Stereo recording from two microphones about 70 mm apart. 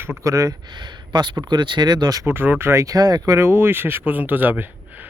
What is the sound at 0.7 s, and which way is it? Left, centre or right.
Speech, right.